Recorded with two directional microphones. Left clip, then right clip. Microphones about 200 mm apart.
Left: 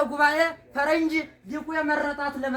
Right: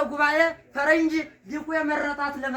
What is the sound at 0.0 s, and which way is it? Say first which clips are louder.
Speech: even; 5° left (ahead or behind).